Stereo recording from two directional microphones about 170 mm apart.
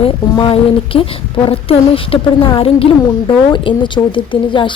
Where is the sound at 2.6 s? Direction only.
35° left (ahead or behind).